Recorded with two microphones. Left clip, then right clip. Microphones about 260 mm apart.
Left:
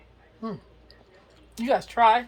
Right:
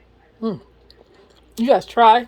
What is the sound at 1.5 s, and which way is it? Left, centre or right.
Speech, right.